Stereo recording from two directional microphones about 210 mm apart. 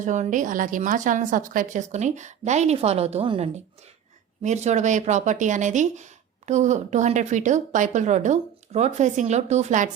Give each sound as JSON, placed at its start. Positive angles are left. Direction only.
{"t": 0.0, "sound": "speech", "side_deg": -35}